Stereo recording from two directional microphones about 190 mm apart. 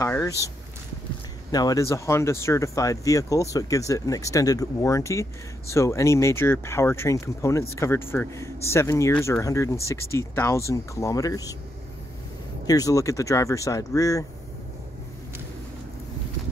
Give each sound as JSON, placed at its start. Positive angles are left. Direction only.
{"t": 0.0, "sound": "speech", "side_deg": 15}
{"t": 1.5, "sound": "speech", "side_deg": 20}
{"t": 12.6, "sound": "speech", "side_deg": 20}